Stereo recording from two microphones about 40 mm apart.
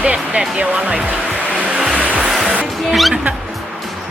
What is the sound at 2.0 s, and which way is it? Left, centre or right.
Music, right.